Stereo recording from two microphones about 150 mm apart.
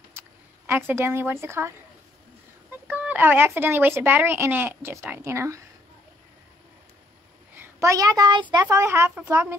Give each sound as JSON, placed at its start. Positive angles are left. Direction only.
{"t": 0.2, "sound": "a sound", "side_deg": -15}
{"t": 0.7, "sound": "speech", "side_deg": -15}
{"t": 2.9, "sound": "speech", "side_deg": -10}
{"t": 7.5, "sound": "a woman's voice", "side_deg": -15}
{"t": 8.6, "sound": "speech", "side_deg": -15}